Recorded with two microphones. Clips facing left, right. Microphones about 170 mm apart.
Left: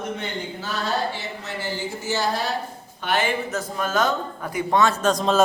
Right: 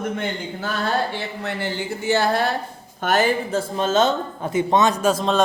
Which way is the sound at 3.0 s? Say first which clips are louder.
Right 4 dB; 40° right (ahead or behind).